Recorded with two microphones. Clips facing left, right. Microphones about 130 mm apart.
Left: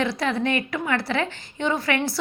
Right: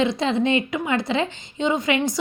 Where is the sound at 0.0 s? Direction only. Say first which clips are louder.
Right 3 dB; 20° right (ahead or behind).